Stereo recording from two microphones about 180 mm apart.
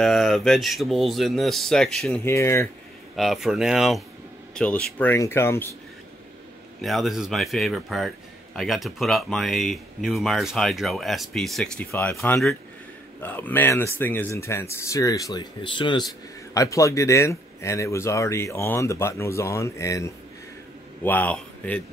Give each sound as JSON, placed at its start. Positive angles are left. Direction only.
{"t": 0.0, "sound": "speech", "side_deg": 0}
{"t": 2.2, "sound": "speech", "side_deg": 15}
{"t": 3.2, "sound": "speech", "side_deg": 0}
{"t": 6.8, "sound": "speech", "side_deg": 0}
{"t": 11.9, "sound": "speech", "side_deg": 15}
{"t": 12.2, "sound": "speech", "side_deg": 0}